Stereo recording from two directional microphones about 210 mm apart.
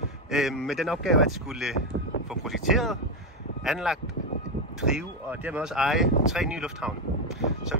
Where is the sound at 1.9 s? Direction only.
90° right.